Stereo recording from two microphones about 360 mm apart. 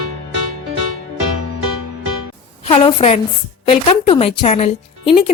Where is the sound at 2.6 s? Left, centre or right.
Centre.